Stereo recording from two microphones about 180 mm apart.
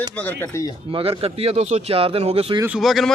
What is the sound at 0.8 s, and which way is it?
Speech, 30° right (ahead or behind).